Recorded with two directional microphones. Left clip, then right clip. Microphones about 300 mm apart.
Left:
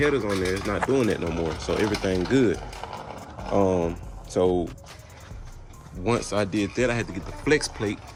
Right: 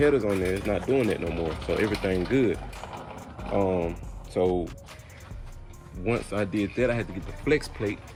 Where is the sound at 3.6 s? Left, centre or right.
Centre.